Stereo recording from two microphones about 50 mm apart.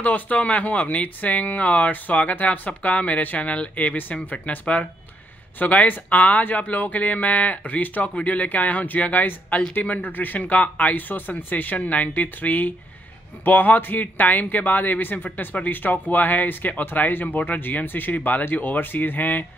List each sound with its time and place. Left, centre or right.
0.0 s a man's voice: left